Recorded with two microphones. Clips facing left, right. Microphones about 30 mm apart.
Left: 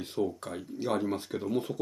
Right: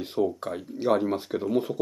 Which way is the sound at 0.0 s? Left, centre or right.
Centre.